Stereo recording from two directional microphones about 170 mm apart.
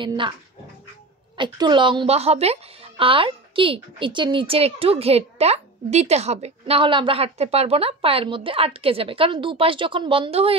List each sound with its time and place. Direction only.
0.0 s speech: 30° right (ahead or behind)
1.3 s a woman's voice: 25° right (ahead or behind)